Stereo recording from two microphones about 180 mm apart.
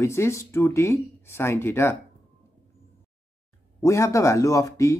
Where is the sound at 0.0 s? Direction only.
15° left (ahead or behind).